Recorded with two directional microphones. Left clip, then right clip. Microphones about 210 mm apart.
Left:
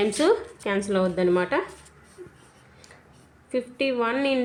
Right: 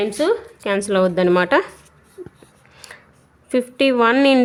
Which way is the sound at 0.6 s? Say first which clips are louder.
Right 7 dB; 30° right (ahead or behind).